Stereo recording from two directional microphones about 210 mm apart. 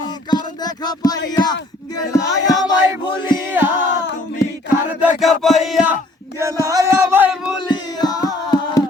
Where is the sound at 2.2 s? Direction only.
55° left (ahead or behind).